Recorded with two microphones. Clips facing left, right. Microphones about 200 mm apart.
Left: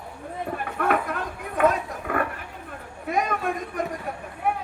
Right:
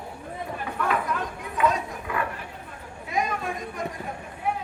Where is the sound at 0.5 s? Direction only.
55° left (ahead or behind).